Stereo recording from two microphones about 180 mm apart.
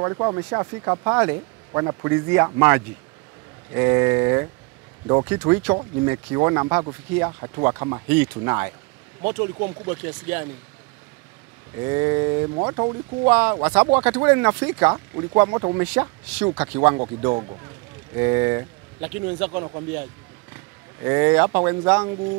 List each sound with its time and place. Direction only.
0.0 s speech: 20° right (ahead or behind)
11.7 s speech: 15° right (ahead or behind)
12.4 s speech: 25° right (ahead or behind)
13.2 s speech: 10° right (ahead or behind)
15.8 s speech: 10° right (ahead or behind)
18.1 s speech: 15° right (ahead or behind)
20.5 s vehicle: 15° right (ahead or behind)
21.5 s speech: 10° right (ahead or behind)